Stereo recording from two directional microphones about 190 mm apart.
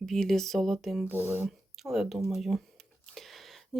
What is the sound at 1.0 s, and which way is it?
Speech, 10° right (ahead or behind).